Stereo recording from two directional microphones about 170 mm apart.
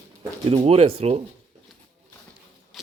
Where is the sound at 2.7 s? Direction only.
Centre (ahead or behind).